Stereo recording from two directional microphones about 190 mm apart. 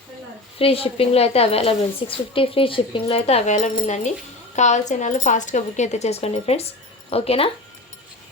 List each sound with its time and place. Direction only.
0.6 s a woman's voice: 30° left (ahead or behind)